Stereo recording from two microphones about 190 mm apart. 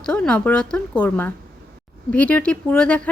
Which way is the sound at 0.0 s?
5° left (ahead or behind).